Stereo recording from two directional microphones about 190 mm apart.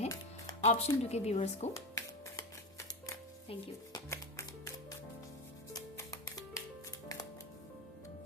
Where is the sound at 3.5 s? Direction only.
20° left (ahead or behind).